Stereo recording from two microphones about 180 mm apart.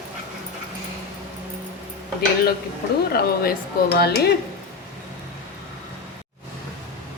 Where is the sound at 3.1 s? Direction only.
60° left (ahead or behind).